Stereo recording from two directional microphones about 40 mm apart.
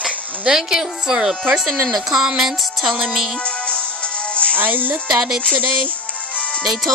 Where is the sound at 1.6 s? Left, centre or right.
Centre.